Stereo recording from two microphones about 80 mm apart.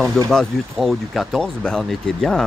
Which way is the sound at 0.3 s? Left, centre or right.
Centre.